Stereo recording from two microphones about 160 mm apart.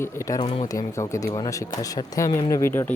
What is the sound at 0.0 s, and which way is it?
Speech, 15° left (ahead or behind).